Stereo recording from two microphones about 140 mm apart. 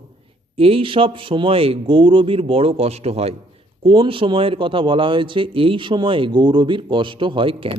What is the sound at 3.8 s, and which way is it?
A man's voice, 40° right (ahead or behind).